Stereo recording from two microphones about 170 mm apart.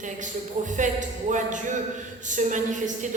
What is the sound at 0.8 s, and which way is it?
A woman's voice, 45° right (ahead or behind).